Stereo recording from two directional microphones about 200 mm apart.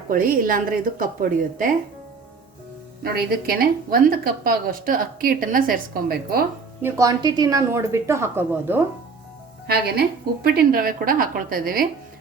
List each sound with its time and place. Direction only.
0.1 s a woman's voice: 45° right (ahead or behind)
3.0 s a woman's voice: 50° right (ahead or behind)
6.8 s a woman's voice: 15° right (ahead or behind)
9.6 s a woman's voice: 50° right (ahead or behind)